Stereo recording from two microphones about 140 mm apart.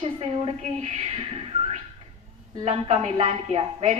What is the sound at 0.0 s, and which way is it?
A woman's voice, 45° right (ahead or behind).